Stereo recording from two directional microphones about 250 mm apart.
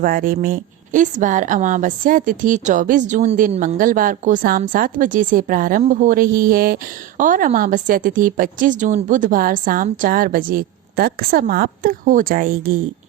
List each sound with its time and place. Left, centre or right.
0.0 s a woman's voice: right